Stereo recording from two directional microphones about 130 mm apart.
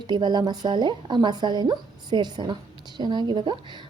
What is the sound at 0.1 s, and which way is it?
A woman's voice, 35° right (ahead or behind).